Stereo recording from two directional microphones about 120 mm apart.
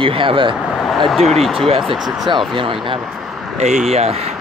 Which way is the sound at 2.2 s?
45° right (ahead or behind).